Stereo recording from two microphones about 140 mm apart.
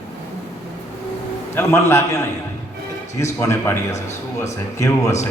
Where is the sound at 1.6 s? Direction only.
20° left (ahead or behind).